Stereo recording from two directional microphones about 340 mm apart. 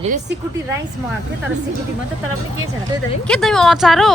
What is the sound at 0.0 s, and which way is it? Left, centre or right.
Speech, right.